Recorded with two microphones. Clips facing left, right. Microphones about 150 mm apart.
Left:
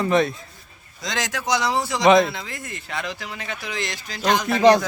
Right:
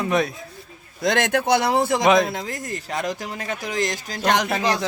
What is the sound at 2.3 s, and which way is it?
Speech, 45° right (ahead or behind).